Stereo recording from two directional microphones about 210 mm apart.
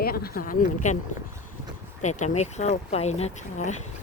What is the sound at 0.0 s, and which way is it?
Speech, 45° left (ahead or behind).